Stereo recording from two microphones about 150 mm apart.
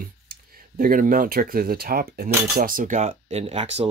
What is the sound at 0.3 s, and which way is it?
Speech, 70° right (ahead or behind).